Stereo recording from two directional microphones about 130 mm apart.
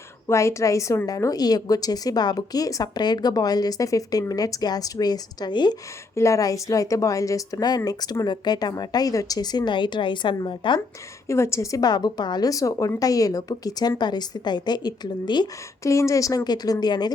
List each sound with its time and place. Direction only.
0.3 s a woman's voice: 20° left (ahead or behind)
6.1 s a woman's voice: 25° left (ahead or behind); by 10.8 s 40° left (ahead or behind)
11.3 s a woman's voice: 20° left (ahead or behind)
15.8 s a woman's voice: 25° left (ahead or behind)